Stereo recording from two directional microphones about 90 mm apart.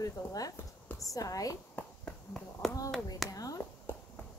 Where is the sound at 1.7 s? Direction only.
10° left (ahead or behind).